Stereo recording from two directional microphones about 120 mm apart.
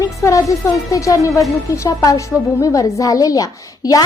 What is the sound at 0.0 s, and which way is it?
A woman's voice, 25° left (ahead or behind).